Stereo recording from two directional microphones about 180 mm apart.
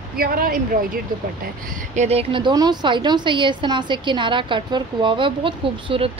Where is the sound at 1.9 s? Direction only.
35° right (ahead or behind).